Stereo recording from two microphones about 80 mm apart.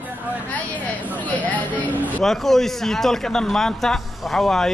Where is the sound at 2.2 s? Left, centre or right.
Centre.